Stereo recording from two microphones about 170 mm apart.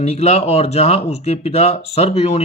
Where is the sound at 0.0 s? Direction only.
40° left (ahead or behind).